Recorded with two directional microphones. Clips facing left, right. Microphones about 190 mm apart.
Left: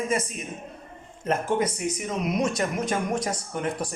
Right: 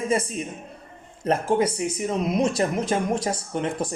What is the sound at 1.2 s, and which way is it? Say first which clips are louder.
Speech: right 3 dB; 30° right (ahead or behind).